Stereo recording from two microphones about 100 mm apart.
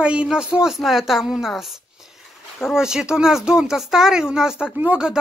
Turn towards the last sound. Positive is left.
turn(degrees=-10)  # may be behind; listen again after turning